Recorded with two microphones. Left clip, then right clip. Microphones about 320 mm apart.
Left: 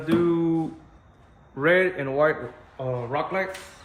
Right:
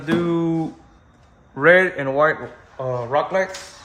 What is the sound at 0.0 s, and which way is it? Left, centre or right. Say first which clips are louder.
Music: right 1 dB; right.